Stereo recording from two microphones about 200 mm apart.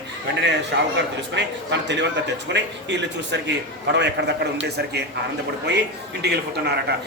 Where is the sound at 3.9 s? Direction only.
60° right (ahead or behind).